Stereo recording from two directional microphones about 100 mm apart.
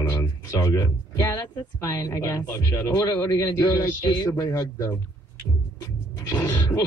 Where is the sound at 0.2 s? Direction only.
35° left (ahead or behind).